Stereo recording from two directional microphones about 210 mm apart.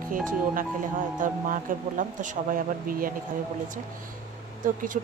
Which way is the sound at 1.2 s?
40° right (ahead or behind).